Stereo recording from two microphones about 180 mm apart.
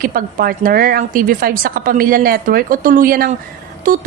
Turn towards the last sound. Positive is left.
turn(degrees=-50)  # may be behind; listen again after turning